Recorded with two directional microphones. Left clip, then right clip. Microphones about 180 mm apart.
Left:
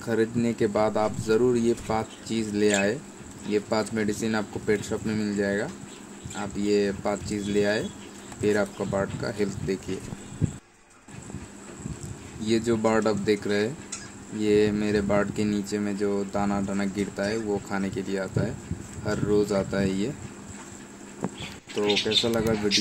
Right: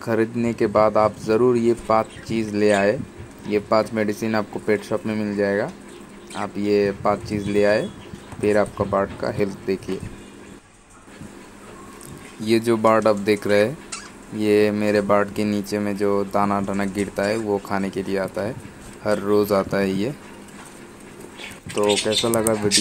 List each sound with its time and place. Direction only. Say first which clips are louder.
0.0 s speech: right 4 dB; 20° right (ahead or behind)
12.4 s speech: right 6 dB; 20° right (ahead or behind)
21.8 s speech: right 4 dB; 15° right (ahead or behind)